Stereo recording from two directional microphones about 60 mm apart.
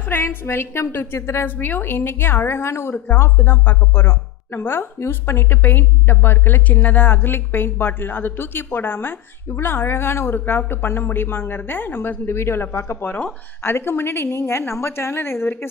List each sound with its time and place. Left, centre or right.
0.1 s a woman's voice: left
1.6 s speech: left
3.1 s speech: left
13.0 s speech: left
13.6 s a woman's voice: left